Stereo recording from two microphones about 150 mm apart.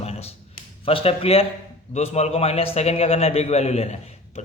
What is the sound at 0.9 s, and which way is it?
A man's voice, 40° left (ahead or behind).